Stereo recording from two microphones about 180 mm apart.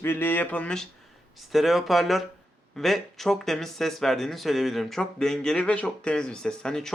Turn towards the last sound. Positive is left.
turn(degrees=5)  # may be behind; listen again after turning